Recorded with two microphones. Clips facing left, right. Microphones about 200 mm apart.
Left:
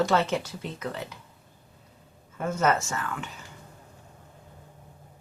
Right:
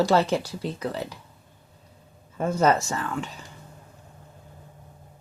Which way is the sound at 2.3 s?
35° right (ahead or behind).